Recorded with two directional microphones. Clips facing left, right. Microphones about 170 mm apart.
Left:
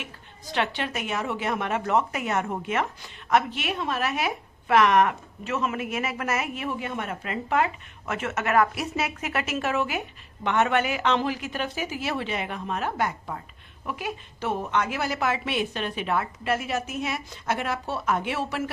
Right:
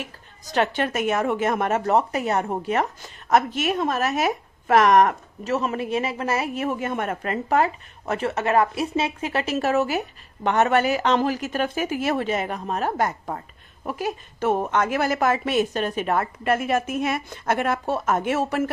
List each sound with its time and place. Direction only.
0.0 s a woman's voice: 40° right (ahead or behind)